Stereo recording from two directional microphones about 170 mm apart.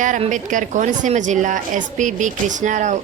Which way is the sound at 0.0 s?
50° right (ahead or behind).